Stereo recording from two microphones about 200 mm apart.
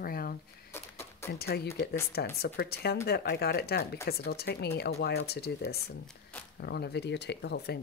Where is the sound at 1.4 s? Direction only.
55° left (ahead or behind).